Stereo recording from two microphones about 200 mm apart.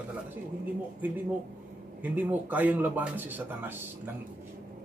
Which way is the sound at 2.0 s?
10° right (ahead or behind).